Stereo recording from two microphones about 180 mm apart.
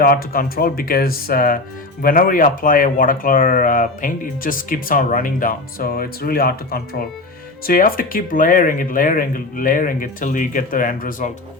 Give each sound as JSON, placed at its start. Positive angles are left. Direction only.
{"t": 0.0, "sound": "speech", "side_deg": 55}